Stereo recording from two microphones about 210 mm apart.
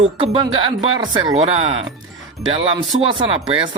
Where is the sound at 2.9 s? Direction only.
25° right (ahead or behind).